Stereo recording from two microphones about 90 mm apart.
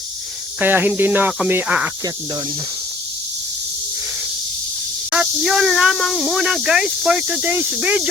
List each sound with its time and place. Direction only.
0.6 s speech: 20° right (ahead or behind)
5.1 s speech: 10° right (ahead or behind)